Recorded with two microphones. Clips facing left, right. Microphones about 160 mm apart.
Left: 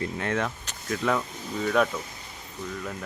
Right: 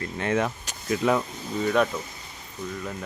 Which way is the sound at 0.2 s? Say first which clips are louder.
Right 7 dB; 5° right (ahead or behind).